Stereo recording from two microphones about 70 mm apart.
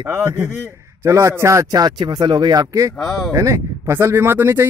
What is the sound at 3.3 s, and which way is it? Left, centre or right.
Speech, right.